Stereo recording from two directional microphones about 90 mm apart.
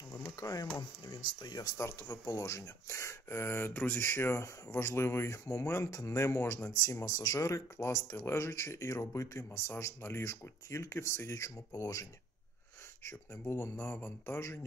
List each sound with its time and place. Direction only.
0.4 s speech: 40° left (ahead or behind)
1.8 s speech: 35° left (ahead or behind)
13.8 s speech: 20° left (ahead or behind)